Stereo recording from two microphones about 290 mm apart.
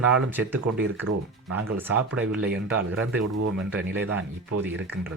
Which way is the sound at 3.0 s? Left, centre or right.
Right.